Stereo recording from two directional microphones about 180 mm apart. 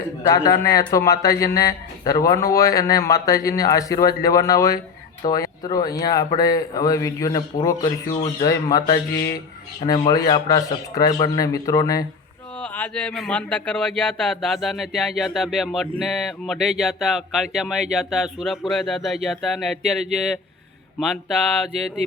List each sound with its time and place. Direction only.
0.2 s speech: 20° left (ahead or behind)
12.5 s speech: 10° left (ahead or behind)
21.7 s mantra: 35° right (ahead or behind)